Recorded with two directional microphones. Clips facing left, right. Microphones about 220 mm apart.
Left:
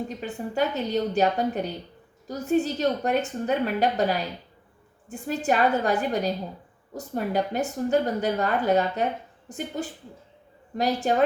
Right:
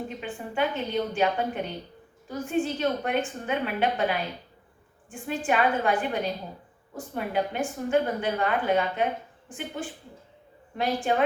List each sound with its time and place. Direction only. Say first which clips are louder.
0.2 s a woman's voice: left 2 dB; 40° left (ahead or behind)